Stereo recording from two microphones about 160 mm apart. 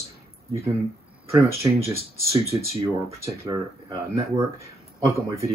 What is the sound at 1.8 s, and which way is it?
Speech, 15° right (ahead or behind).